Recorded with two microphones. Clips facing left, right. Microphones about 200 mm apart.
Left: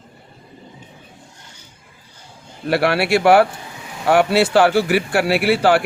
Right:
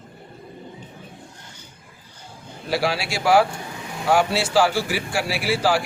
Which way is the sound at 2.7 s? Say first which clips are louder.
Left 7 dB; 60° left (ahead or behind).